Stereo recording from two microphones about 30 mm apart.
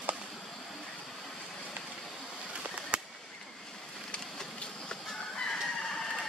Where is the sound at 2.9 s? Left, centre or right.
Right.